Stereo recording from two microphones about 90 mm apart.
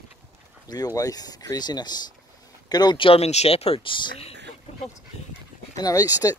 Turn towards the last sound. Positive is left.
turn(degrees=40)  # may be behind; listen again after turning